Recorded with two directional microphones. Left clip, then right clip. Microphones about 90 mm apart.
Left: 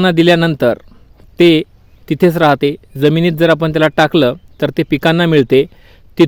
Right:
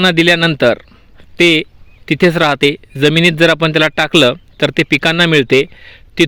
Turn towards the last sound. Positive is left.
turn(degrees=35)  # may be behind; listen again after turning